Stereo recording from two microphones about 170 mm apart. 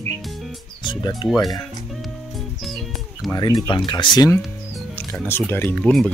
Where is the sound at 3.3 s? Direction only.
20° left (ahead or behind).